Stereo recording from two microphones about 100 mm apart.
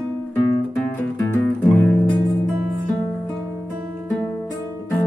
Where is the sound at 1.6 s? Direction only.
15° left (ahead or behind).